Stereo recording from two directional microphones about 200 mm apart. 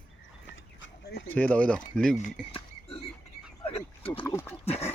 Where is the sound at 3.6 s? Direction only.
30° left (ahead or behind).